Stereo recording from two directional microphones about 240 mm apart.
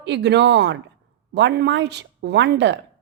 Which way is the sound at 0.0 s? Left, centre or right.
Right.